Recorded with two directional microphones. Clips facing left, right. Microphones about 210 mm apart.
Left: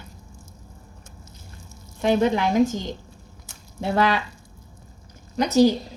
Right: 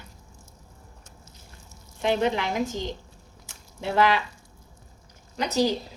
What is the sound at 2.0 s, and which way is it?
Speech, 45° left (ahead or behind).